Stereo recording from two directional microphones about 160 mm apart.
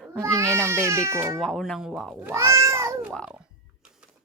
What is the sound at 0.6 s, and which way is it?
Speech, 15° right (ahead or behind).